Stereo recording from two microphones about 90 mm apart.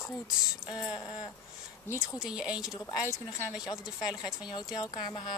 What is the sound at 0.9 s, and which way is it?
Speech, 50° left (ahead or behind).